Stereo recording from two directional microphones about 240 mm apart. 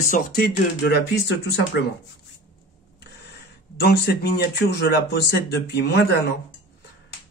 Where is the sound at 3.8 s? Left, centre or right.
Left.